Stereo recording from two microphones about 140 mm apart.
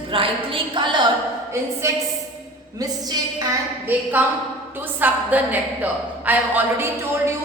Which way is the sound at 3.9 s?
10° right (ahead or behind).